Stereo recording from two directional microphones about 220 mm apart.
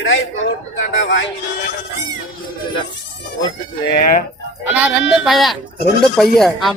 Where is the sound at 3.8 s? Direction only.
45° left (ahead or behind).